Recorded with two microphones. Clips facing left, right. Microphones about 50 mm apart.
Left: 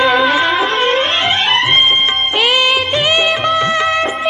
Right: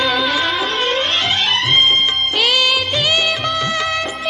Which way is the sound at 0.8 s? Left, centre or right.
Left.